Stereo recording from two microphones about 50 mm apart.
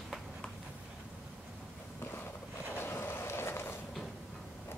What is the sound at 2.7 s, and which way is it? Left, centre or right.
Vehicle, left.